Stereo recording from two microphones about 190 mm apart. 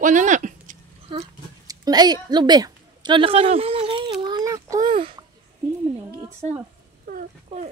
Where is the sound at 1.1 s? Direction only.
25° right (ahead or behind).